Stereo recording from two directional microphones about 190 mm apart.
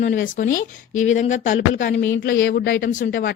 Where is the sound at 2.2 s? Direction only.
60° left (ahead or behind).